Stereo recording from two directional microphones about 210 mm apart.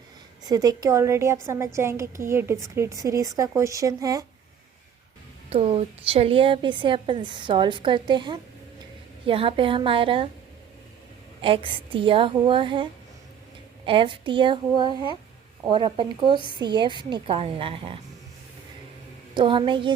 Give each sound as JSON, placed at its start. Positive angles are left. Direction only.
{"t": 0.4, "sound": "speech", "side_deg": -20}
{"t": 5.5, "sound": "a woman's voice", "side_deg": -30}
{"t": 11.4, "sound": "a woman's voice", "side_deg": -25}
{"t": 19.3, "sound": "a woman's voice", "side_deg": -20}